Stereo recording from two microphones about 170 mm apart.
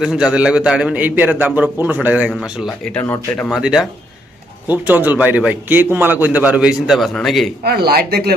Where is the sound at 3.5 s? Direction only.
5° right (ahead or behind).